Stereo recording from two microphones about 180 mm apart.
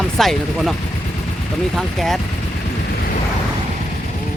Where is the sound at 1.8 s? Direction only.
Centre (ahead or behind).